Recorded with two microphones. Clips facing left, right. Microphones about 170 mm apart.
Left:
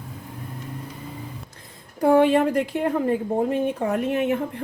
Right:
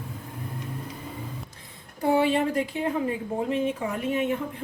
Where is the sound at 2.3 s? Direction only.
55° left (ahead or behind).